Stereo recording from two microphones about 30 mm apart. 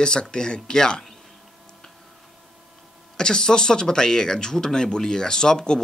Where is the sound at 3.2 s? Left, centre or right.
Left.